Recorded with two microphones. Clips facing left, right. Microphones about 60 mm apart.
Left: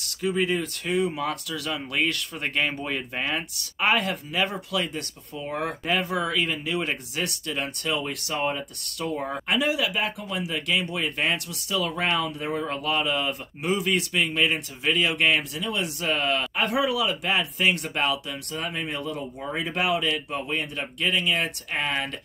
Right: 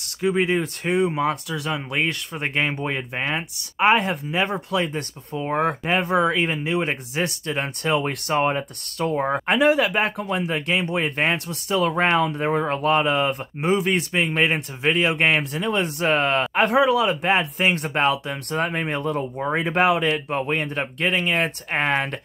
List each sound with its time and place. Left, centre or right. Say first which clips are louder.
0.2 s speech: right 4 dB; right